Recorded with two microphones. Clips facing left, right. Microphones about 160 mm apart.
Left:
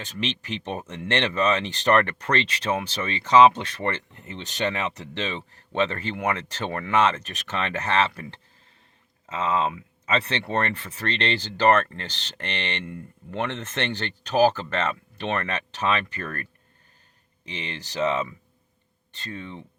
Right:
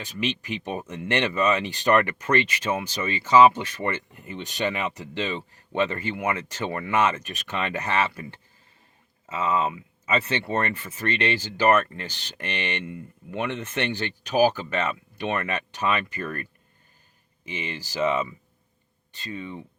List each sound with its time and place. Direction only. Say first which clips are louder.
0.0 s speech: right 2 dB; 10° right (ahead or behind)
2.1 s speech: right 2 dB; 70° left (ahead or behind)
3.0 s speech: even; 10° right (ahead or behind)
6.1 s speech: even; 65° left (ahead or behind)
6.7 s speech: left 2 dB; 10° right (ahead or behind)
8.1 s speech: even; 70° left (ahead or behind)
10.1 s speech: even; 10° right (ahead or behind)
10.5 s speech: left 3 dB; 65° left (ahead or behind)
11.1 s speech: right 1 dB; 10° right (ahead or behind)